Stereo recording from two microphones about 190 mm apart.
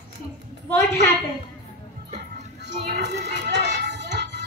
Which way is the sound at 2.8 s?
60° right (ahead or behind).